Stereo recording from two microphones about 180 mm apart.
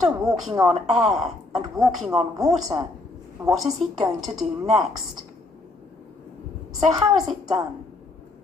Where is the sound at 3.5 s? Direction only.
Centre (ahead or behind).